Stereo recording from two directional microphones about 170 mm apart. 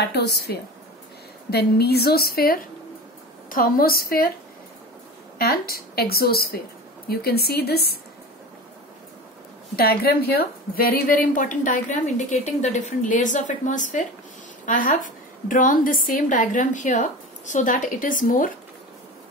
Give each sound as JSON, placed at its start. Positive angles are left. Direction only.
{"t": 0.1, "sound": "a woman's voice", "side_deg": 70}
{"t": 5.4, "sound": "a woman's voice", "side_deg": 65}
{"t": 9.8, "sound": "a woman's voice", "side_deg": 65}